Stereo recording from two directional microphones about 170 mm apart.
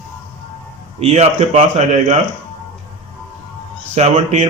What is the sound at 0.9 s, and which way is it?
Speech, 40° right (ahead or behind).